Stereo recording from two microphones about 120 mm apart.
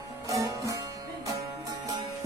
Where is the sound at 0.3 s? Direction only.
30° right (ahead or behind).